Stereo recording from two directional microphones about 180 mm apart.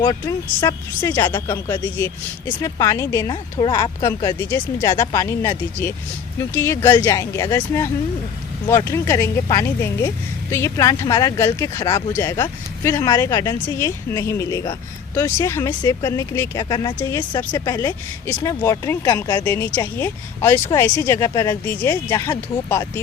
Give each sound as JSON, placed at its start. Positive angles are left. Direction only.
{"t": 0.0, "sound": "speech", "side_deg": 20}